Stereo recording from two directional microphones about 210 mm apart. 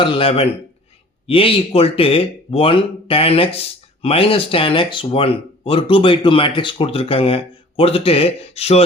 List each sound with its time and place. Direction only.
0.0 s speech: 25° left (ahead or behind)